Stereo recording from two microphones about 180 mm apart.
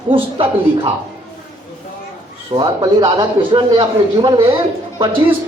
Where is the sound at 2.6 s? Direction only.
25° right (ahead or behind).